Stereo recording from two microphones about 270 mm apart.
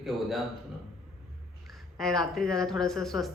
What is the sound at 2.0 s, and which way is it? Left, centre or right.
A woman's voice, centre.